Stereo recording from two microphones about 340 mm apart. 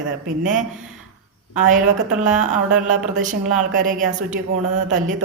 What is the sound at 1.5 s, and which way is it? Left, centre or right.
A woman's voice, right.